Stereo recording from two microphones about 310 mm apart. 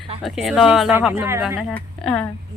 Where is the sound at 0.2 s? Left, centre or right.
Centre.